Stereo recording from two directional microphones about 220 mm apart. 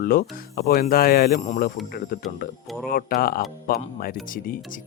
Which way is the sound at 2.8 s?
40° left (ahead or behind).